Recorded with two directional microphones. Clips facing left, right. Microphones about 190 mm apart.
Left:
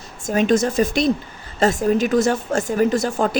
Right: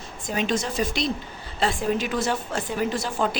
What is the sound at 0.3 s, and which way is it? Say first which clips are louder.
Speech: left 8 dB; 45° left (ahead or behind).